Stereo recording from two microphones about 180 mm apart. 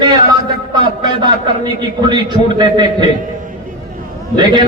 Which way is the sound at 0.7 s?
25° right (ahead or behind).